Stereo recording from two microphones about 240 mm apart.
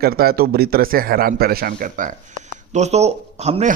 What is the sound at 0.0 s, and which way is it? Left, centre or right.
A man's voice, right.